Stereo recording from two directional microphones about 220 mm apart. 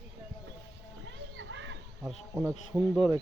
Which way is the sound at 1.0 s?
60° right (ahead or behind).